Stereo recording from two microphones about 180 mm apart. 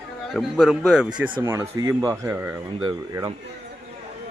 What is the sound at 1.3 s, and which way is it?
A man's voice, 20° right (ahead or behind).